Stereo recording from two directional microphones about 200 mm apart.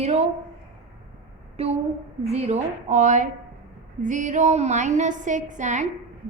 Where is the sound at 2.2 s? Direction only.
35° right (ahead or behind).